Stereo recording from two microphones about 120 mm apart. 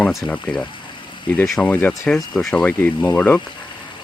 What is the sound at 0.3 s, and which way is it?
Speech, 10° left (ahead or behind).